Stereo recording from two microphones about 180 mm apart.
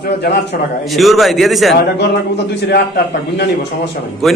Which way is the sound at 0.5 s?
55° left (ahead or behind).